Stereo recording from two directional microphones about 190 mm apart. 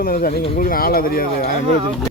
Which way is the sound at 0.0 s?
50° left (ahead or behind).